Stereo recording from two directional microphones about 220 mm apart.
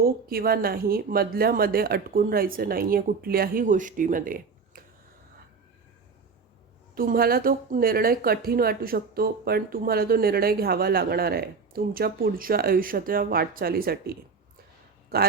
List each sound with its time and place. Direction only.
0.0 s speech: 45° right (ahead or behind)
6.9 s speech: 40° right (ahead or behind)